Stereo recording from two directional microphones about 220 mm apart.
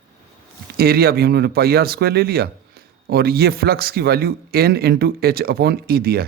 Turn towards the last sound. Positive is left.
turn(degrees=-45)  # may be behind; listen again after turning